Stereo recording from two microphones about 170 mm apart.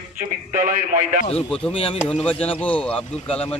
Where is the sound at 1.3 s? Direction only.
5° left (ahead or behind).